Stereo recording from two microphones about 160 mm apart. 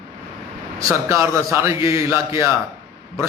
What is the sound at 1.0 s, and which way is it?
A man's voice, 20° right (ahead or behind).